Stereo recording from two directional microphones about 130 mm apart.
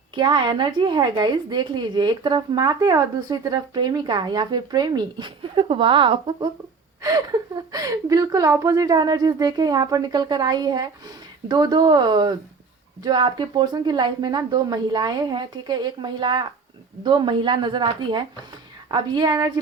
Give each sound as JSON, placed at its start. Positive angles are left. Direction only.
{"t": 0.1, "sound": "a woman's voice", "side_deg": -35}
{"t": 7.0, "sound": "a woman's voice", "side_deg": -30}